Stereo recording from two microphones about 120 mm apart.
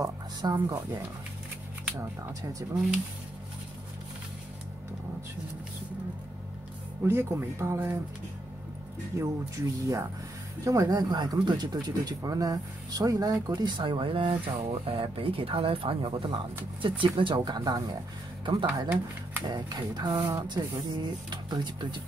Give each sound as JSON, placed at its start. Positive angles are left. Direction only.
{"t": 0.0, "sound": "speech", "side_deg": -30}
{"t": 2.0, "sound": "speech", "side_deg": -30}
{"t": 7.0, "sound": "speech", "side_deg": -20}
{"t": 9.1, "sound": "speech", "side_deg": -25}